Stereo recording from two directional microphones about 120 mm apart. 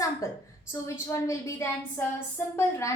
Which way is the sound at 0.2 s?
25° left (ahead or behind).